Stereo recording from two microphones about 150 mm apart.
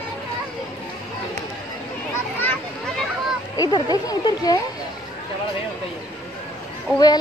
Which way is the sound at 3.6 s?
25° left (ahead or behind).